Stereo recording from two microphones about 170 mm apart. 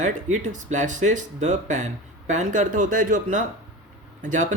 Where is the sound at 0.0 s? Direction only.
45° right (ahead or behind).